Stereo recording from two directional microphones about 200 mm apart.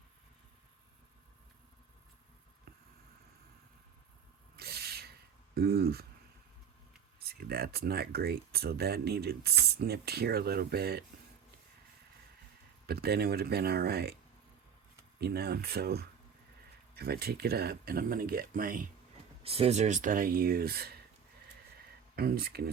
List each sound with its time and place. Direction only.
4.5 s a sound: 50° right (ahead or behind)
5.5 s speech: 50° right (ahead or behind)
7.2 s speech: 50° right (ahead or behind)
12.9 s speech: 50° right (ahead or behind)
15.2 s speech: 50° right (ahead or behind)
19.4 s speech: 30° right (ahead or behind); by 20.9 s 50° right (ahead or behind)
22.1 s speech: 50° right (ahead or behind)